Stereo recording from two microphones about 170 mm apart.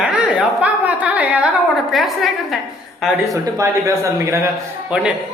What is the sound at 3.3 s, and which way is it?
Speech, 20° right (ahead or behind).